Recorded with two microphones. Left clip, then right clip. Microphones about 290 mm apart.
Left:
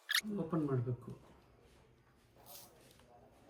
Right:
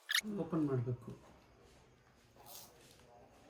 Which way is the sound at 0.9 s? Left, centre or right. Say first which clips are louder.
Even; centre.